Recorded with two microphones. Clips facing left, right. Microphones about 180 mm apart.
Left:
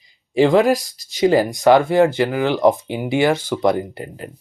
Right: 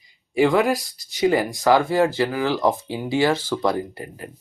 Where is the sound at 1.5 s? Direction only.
20° left (ahead or behind).